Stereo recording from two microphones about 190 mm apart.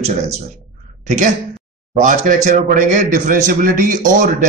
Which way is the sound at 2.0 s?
40° right (ahead or behind).